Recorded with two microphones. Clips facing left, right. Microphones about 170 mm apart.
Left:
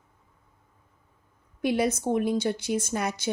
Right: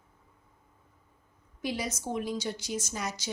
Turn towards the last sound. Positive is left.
turn(degrees=55)  # may be behind; listen again after turning